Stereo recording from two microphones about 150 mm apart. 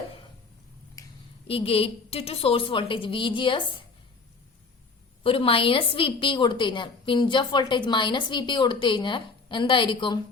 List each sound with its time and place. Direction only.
1.0 s a sound: 20° left (ahead or behind)
1.5 s a woman's voice: 40° left (ahead or behind)
5.2 s a woman's voice: 40° left (ahead or behind)